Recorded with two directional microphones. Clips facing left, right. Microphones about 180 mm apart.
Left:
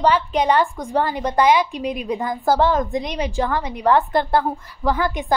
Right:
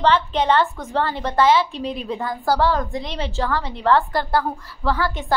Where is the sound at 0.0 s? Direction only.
10° left (ahead or behind).